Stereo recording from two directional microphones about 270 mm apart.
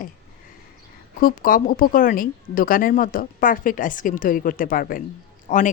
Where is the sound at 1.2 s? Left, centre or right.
Left.